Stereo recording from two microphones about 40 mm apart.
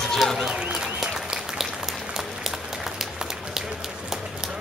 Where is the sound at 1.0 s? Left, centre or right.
Centre.